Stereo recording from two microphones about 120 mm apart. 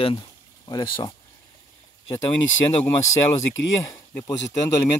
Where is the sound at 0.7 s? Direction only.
35° left (ahead or behind).